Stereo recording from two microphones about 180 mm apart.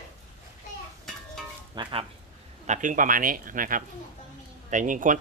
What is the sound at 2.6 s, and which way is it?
Speech, 45° right (ahead or behind).